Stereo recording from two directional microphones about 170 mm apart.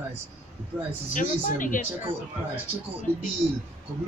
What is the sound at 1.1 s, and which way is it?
Speech, 50° left (ahead or behind).